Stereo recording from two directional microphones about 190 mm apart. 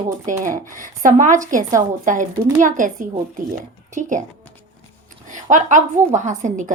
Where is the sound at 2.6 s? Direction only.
45° right (ahead or behind).